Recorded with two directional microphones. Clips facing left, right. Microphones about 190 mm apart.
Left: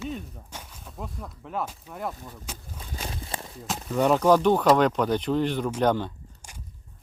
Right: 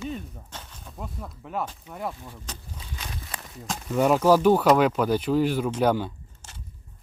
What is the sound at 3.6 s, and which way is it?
Speech, 5° right (ahead or behind).